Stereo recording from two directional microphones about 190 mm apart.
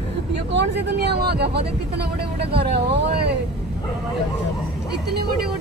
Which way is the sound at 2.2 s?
30° right (ahead or behind).